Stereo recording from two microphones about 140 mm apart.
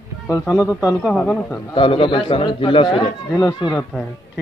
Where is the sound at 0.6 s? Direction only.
5° right (ahead or behind).